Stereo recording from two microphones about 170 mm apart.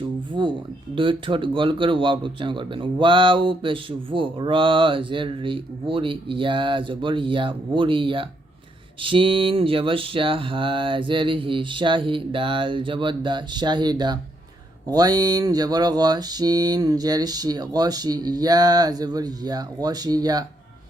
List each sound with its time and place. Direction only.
0.4 s a man's voice: 25° right (ahead or behind)